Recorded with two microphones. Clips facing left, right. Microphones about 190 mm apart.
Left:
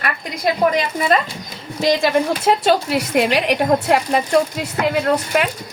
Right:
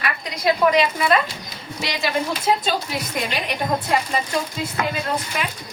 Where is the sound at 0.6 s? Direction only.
40° left (ahead or behind).